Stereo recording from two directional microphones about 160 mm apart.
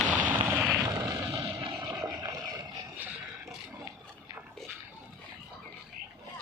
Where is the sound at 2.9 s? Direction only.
10° right (ahead or behind).